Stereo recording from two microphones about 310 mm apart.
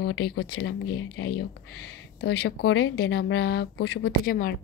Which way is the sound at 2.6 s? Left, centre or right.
Left.